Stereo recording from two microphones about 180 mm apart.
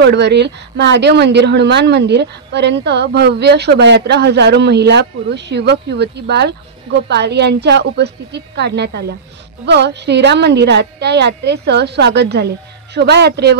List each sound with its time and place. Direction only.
0.0 s speech: 70° right (ahead or behind)